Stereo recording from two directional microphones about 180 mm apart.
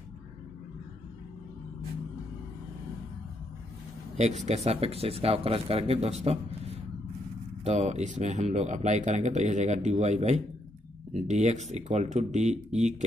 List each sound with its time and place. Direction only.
4.5 s speech: 35° right (ahead or behind)